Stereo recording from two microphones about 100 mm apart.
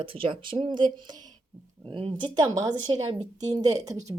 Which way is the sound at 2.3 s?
45° right (ahead or behind).